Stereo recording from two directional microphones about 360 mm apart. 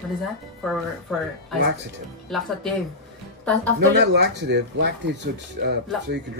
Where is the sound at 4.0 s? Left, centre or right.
Right.